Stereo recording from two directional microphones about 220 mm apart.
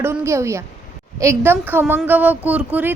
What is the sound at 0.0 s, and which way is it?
A woman's voice, 10° right (ahead or behind).